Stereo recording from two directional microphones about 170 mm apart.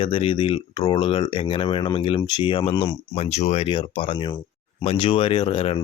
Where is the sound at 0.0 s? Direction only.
30° left (ahead or behind).